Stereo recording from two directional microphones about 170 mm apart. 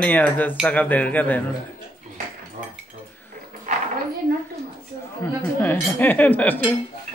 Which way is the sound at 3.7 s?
50° right (ahead or behind).